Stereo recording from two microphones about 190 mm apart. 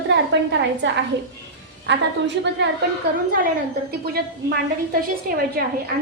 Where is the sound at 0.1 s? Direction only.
70° right (ahead or behind).